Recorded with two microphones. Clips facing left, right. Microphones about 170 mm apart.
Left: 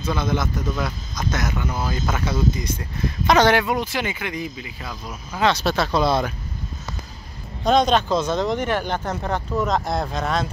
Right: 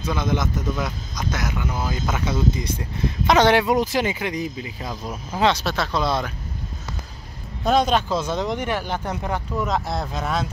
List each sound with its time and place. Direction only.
0.0 s speech: 15° right (ahead or behind)
3.6 s speech: 40° right (ahead or behind)
5.5 s speech: centre (ahead or behind)
7.6 s speech: 5° right (ahead or behind)